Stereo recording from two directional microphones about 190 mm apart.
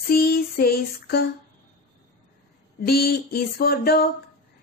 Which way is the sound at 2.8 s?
50° left (ahead or behind).